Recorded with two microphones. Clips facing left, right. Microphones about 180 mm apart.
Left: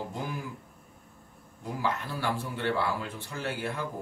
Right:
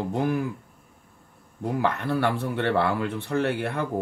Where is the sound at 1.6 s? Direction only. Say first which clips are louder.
Right 7 dB; 60° right (ahead or behind).